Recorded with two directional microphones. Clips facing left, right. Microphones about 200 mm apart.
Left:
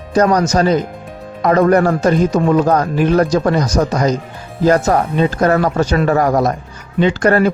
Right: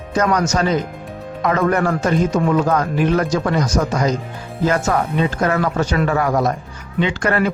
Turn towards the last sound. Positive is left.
turn(degrees=40)  # may be behind; listen again after turning